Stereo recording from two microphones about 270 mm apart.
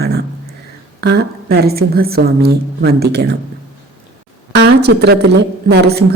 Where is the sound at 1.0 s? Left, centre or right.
Right.